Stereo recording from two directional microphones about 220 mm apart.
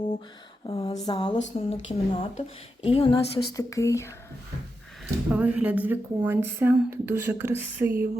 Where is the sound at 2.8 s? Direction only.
25° left (ahead or behind).